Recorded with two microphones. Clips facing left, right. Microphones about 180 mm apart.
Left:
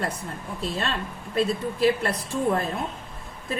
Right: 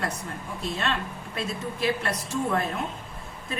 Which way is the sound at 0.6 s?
30° left (ahead or behind).